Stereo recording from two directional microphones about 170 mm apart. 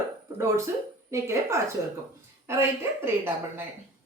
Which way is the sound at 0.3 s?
15° right (ahead or behind).